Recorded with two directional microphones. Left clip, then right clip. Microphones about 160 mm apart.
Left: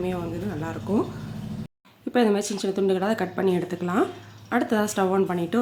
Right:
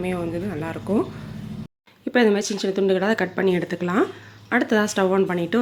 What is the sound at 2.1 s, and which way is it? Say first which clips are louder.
A woman's voice: right 3 dB; 10° right (ahead or behind).